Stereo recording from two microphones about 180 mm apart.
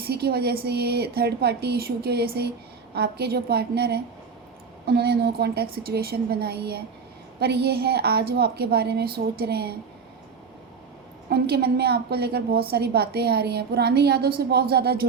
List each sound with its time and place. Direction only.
0.0 s a woman's voice: 60° right (ahead or behind)
11.3 s a woman's voice: 60° right (ahead or behind)